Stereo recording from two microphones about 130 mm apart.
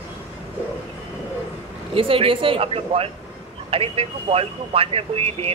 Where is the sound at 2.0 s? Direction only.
45° right (ahead or behind).